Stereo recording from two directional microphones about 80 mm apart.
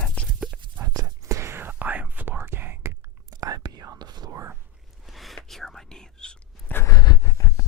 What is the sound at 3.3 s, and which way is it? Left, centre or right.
Whispering, right.